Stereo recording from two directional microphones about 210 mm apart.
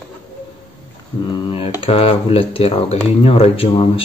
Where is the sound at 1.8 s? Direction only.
25° left (ahead or behind).